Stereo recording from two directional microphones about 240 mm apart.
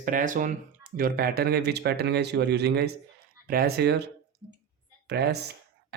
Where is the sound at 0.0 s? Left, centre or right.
Right.